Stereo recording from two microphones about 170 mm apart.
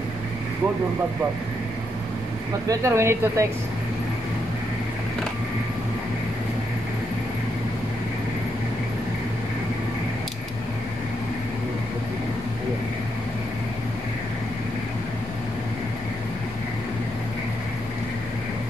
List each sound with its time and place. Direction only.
2.7 s speech: 15° right (ahead or behind)